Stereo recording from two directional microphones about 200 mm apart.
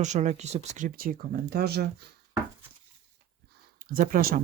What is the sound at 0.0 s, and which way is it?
Speech, 35° right (ahead or behind).